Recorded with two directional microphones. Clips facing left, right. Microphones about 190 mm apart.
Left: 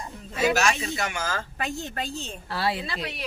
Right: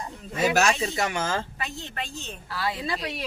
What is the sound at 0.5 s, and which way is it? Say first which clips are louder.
Speech: right 2 dB; 35° right (ahead or behind).